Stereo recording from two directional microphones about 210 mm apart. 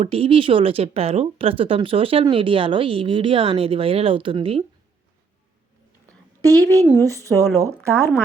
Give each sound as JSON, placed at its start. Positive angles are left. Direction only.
{"t": 0.0, "sound": "speech", "side_deg": -25}
{"t": 6.4, "sound": "a woman's voice", "side_deg": -15}